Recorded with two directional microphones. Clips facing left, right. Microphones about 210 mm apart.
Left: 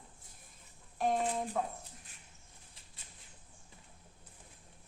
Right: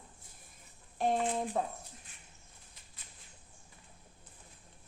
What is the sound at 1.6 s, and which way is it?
Speech, 30° right (ahead or behind).